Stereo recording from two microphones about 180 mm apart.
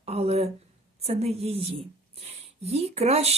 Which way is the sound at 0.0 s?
35° right (ahead or behind).